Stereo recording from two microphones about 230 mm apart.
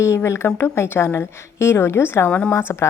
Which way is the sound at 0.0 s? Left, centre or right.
Centre.